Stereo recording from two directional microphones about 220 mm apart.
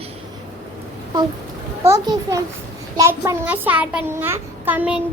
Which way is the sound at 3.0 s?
15° right (ahead or behind).